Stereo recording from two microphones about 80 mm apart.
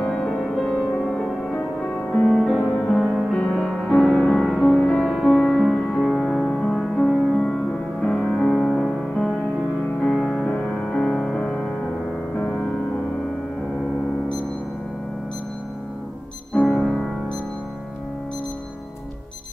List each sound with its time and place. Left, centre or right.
0.2 s music: centre
3.3 s music: centre
10.1 s music: centre
10.4 s music: centre
10.9 s music: centre
16.5 s music: centre